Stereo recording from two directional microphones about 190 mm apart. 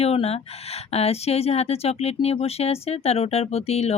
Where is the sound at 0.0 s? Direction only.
30° left (ahead or behind).